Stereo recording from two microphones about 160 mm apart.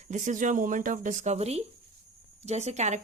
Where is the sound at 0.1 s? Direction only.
50° right (ahead or behind).